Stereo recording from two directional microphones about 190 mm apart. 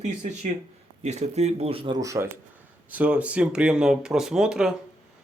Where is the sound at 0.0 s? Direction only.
40° right (ahead or behind).